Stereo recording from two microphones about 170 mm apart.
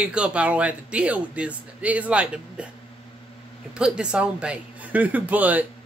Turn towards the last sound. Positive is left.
turn(degrees=-10)  # may be behind; listen again after turning